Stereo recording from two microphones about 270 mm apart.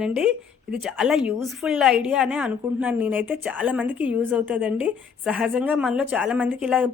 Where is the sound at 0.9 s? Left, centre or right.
Centre.